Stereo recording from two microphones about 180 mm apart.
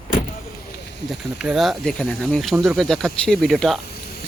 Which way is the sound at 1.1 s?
Centre (ahead or behind).